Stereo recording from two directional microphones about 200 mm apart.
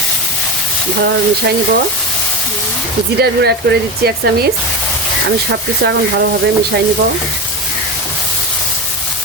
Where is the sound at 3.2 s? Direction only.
55° right (ahead or behind).